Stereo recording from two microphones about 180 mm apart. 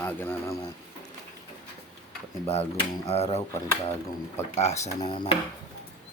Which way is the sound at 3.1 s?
35° left (ahead or behind).